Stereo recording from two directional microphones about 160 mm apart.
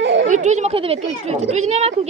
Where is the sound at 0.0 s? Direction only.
90° right.